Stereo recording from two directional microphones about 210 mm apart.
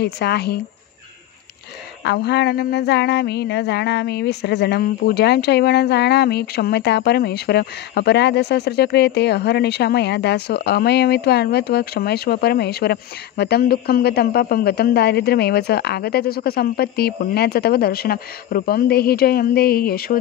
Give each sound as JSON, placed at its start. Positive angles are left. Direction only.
{"t": 0.0, "sound": "speech", "side_deg": 50}
{"t": 2.0, "sound": "speech", "side_deg": 55}